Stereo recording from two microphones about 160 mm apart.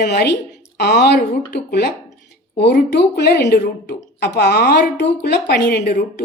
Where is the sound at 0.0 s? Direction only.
85° left.